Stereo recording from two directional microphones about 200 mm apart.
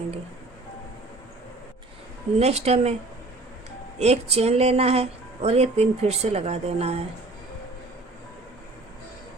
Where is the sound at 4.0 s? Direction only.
30° right (ahead or behind).